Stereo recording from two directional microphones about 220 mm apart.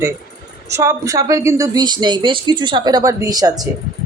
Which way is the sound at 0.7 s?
15° right (ahead or behind).